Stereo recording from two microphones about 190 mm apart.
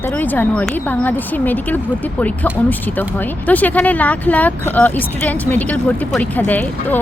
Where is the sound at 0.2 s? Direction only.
10° left (ahead or behind).